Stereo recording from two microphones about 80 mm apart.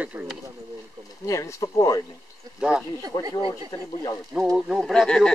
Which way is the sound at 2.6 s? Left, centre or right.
Centre.